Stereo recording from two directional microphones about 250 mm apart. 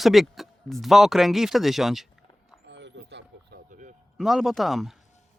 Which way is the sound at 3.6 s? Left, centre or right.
Right.